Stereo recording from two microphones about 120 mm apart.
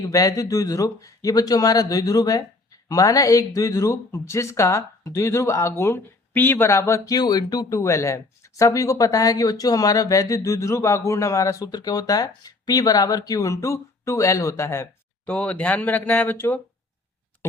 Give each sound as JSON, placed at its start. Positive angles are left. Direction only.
{"t": 0.0, "sound": "speech", "side_deg": 30}
{"t": 15.3, "sound": "speech", "side_deg": 10}